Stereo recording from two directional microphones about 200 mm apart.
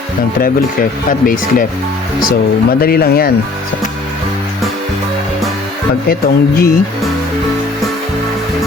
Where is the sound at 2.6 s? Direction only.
50° left (ahead or behind).